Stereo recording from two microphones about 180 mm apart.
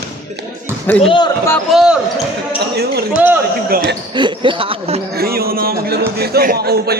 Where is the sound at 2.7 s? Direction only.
60° right (ahead or behind).